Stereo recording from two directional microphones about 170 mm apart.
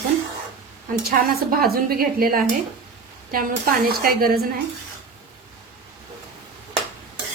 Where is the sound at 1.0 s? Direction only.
65° right (ahead or behind).